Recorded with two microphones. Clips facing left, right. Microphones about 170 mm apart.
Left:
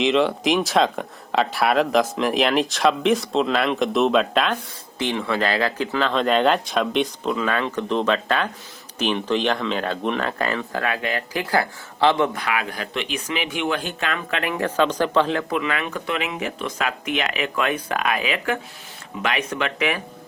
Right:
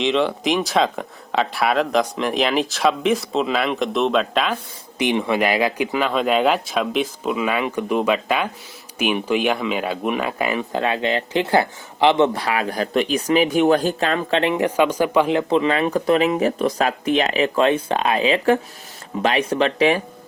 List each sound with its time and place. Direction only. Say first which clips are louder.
0.0 s speech: even; centre (ahead or behind)
4.9 s speech: right 4 dB; 15° right (ahead or behind); by 20.0 s 30° right (ahead or behind)